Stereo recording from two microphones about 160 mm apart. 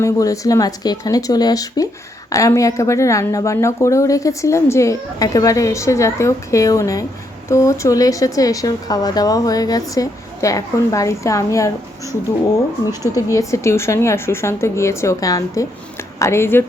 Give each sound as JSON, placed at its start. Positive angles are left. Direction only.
{"t": 0.0, "sound": "a woman's voice", "side_deg": 20}
{"t": 12.8, "sound": "a woman's voice", "side_deg": 25}